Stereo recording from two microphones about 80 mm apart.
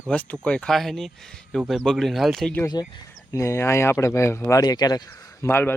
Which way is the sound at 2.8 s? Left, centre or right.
Left.